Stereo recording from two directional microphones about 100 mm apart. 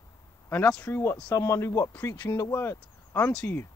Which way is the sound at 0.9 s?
25° left (ahead or behind).